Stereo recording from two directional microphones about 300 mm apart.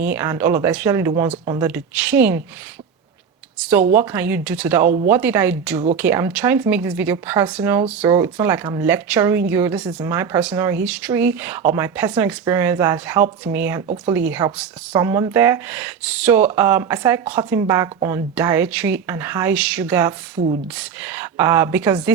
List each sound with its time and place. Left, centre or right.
0.0 s speech: centre
3.9 s speech: centre
13.8 s speech: right
14.3 s speech: centre